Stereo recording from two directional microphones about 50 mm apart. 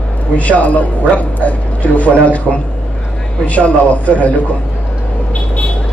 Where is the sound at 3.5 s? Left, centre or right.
Left.